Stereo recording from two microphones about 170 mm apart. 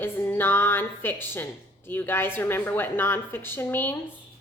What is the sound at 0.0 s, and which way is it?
A woman's voice, 10° left (ahead or behind).